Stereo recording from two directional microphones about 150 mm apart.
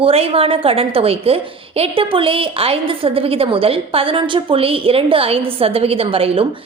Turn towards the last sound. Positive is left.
turn(degrees=-40)  # may be behind; listen again after turning